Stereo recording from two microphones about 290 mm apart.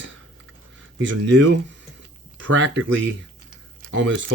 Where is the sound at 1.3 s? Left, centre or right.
Right.